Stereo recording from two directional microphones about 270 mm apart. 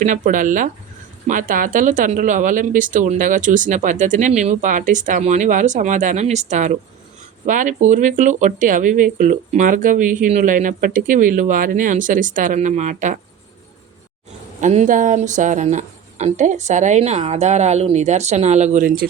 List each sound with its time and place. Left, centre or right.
0.0 s speech: right
14.6 s speech: right